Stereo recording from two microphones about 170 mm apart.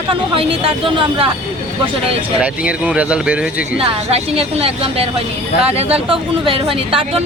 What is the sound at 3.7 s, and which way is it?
Speech, 35° right (ahead or behind).